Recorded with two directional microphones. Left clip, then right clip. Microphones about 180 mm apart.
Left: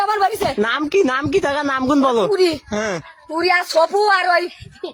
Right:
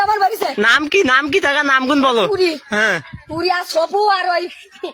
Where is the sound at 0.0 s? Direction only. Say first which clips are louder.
Right 2 dB; 40° left (ahead or behind).